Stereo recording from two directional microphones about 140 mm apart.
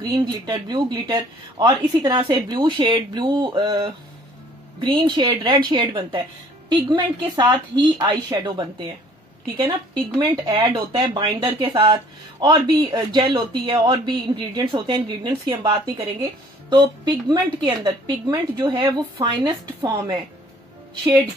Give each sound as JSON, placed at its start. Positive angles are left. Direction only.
{"t": 0.0, "sound": "speech", "side_deg": -30}
{"t": 9.9, "sound": "speech", "side_deg": -30}